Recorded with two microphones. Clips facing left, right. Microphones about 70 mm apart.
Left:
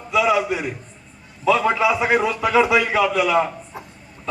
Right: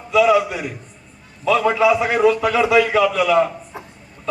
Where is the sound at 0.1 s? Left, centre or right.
Left.